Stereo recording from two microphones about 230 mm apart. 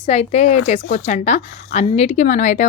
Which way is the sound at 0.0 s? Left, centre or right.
Left.